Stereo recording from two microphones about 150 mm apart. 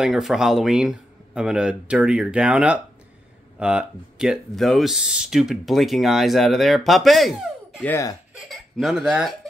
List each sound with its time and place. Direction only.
0.0 s speech: centre (ahead or behind)
7.8 s speech: 20° left (ahead or behind)
8.5 s speech: centre (ahead or behind)